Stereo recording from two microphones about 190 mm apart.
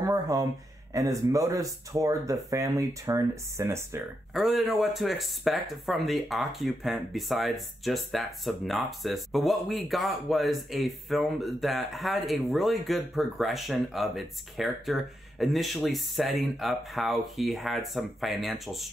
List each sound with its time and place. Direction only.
0.0 s speech: 20° right (ahead or behind)
4.3 s speech: centre (ahead or behind)